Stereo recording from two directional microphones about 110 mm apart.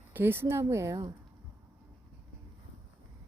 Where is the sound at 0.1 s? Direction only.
20° right (ahead or behind).